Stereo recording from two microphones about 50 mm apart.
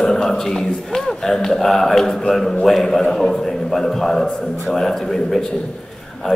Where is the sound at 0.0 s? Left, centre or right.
Centre.